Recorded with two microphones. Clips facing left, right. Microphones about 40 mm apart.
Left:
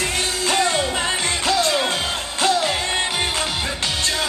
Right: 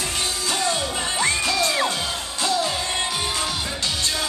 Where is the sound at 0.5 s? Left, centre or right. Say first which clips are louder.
Left 6 dB; left.